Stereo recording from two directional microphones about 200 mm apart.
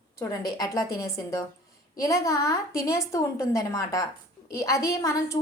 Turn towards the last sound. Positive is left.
turn(degrees=15)  # may be behind; listen again after turning